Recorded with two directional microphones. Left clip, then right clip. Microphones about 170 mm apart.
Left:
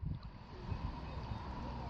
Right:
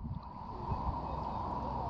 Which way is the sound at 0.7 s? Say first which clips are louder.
Right 11 dB; 20° left (ahead or behind).